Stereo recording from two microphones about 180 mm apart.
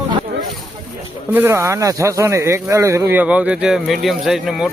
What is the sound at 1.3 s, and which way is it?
Speech, 15° right (ahead or behind).